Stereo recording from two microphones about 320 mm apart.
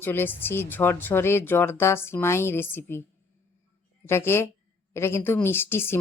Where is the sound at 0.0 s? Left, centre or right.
Centre.